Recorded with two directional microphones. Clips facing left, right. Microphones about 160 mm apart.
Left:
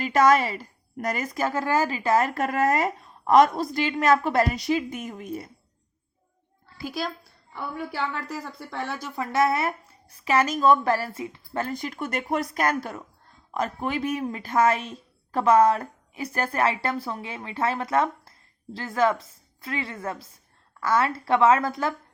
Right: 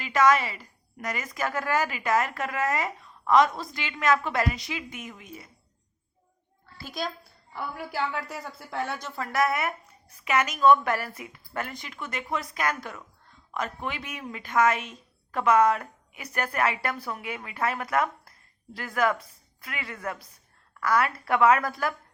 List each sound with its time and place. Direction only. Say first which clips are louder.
0.0 s a woman's voice: left 3 dB; 35° left (ahead or behind)
6.7 s a child's voice: left 3 dB; 5° left (ahead or behind)
7.5 s a woman's voice: left 1 dB; 5° right (ahead or behind)
9.0 s a woman's voice: left 5 dB; 20° left (ahead or behind)